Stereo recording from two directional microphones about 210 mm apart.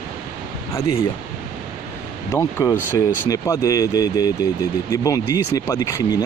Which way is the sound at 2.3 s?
10° left (ahead or behind).